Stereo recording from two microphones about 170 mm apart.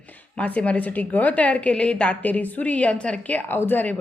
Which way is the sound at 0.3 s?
10° left (ahead or behind).